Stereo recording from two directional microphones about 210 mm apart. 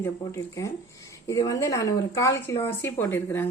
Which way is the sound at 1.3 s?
15° left (ahead or behind).